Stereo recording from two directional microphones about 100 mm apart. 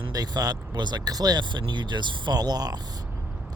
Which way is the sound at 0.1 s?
40° right (ahead or behind).